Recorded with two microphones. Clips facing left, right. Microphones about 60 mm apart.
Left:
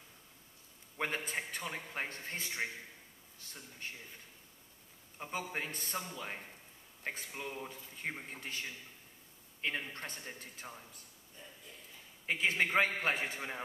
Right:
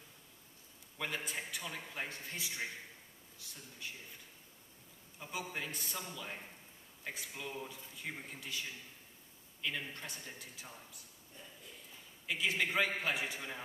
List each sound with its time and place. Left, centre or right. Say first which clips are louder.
0.9 s a man's voice: left 3 dB; left
5.3 s a man's voice: left 2 dB; left
12.3 s a man's voice: left 3 dB; left